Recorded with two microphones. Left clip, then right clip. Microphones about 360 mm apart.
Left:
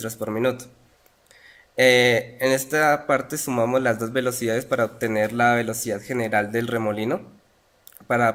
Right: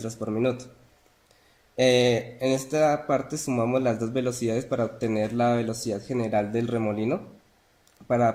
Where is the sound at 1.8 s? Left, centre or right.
Left.